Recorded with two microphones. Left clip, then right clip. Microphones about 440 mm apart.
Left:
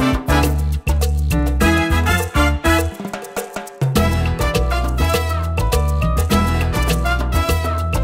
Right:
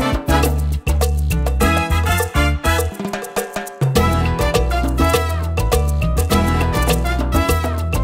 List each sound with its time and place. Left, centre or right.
0.0 s music: right
3.5 s music: right